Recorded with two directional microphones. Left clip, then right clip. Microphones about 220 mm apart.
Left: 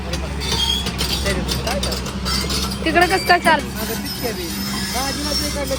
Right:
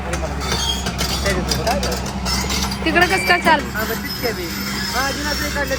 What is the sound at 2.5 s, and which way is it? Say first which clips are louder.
Speech: even; 10° right (ahead or behind).